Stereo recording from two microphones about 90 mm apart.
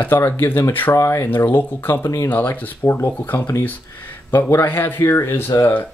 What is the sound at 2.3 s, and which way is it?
Speech, 20° left (ahead or behind).